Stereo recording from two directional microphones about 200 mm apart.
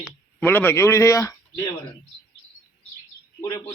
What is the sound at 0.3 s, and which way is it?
A man's voice, 10° left (ahead or behind).